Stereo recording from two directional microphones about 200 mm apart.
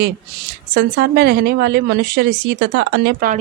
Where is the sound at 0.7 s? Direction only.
55° right (ahead or behind).